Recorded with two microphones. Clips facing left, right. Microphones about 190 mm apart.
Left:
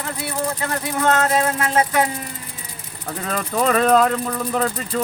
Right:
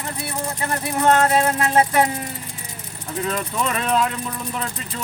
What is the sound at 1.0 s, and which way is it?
Music, 30° right (ahead or behind).